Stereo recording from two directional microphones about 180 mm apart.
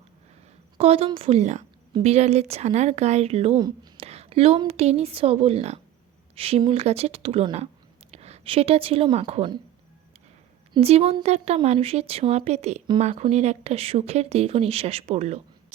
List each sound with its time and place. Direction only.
0.8 s a woman's voice: 35° right (ahead or behind)
10.8 s speech: 35° right (ahead or behind)